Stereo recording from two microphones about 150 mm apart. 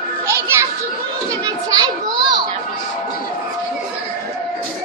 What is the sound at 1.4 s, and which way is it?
Children playing, 30° right (ahead or behind).